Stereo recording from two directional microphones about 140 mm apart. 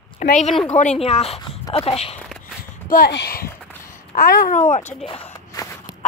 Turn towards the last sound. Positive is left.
turn(degrees=40)  # may be behind; listen again after turning